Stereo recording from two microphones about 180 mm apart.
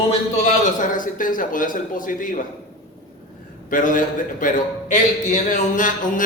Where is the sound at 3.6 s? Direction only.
50° left (ahead or behind).